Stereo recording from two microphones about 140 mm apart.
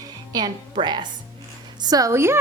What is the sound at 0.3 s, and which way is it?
A woman's voice, 30° right (ahead or behind).